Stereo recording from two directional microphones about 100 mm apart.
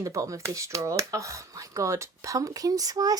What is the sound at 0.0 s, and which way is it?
Speech, 30° right (ahead or behind).